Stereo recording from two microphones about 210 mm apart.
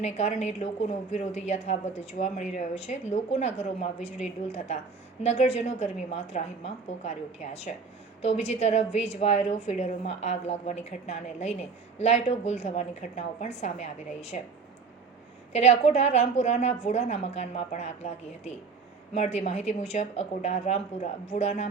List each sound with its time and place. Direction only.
0.0 s a woman's voice: 30° left (ahead or behind)
15.5 s a woman's voice: 30° left (ahead or behind)